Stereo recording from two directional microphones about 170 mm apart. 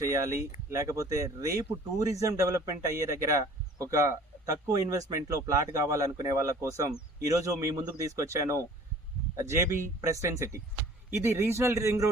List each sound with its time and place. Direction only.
0.0 s speech: 20° right (ahead or behind)